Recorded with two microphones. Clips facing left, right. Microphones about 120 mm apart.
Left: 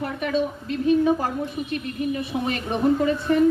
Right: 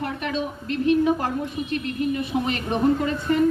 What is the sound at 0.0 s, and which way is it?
A woman's voice, centre (ahead or behind).